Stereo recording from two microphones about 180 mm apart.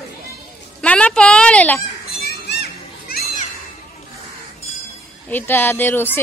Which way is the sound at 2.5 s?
60° left (ahead or behind).